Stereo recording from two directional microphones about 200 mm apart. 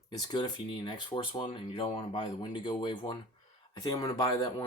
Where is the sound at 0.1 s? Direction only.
20° left (ahead or behind).